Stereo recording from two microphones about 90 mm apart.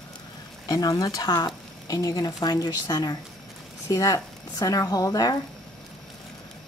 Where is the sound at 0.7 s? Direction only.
40° left (ahead or behind).